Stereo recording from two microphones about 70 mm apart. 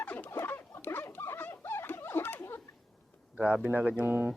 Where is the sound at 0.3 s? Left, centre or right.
Left.